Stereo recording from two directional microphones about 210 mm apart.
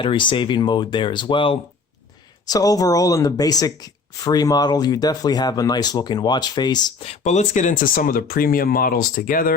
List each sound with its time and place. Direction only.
0.0 s speech: 25° left (ahead or behind); by 9.5 s 40° left (ahead or behind)